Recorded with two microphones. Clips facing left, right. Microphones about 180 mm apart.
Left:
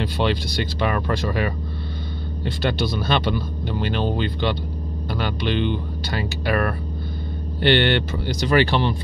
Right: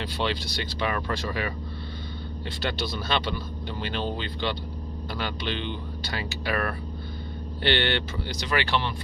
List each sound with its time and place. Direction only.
0.0 s speech: 50° left (ahead or behind)